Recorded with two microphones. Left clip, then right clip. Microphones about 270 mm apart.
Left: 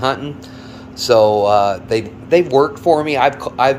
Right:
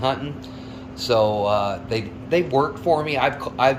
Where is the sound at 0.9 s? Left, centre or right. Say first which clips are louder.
Left 8 dB; centre.